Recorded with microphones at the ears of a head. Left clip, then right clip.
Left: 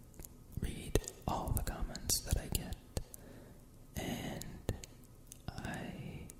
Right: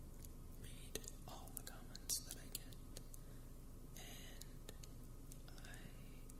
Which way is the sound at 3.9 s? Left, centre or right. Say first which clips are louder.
Left 16 dB; left.